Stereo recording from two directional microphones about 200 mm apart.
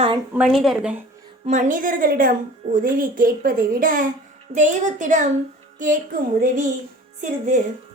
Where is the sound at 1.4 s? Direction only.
40° right (ahead or behind).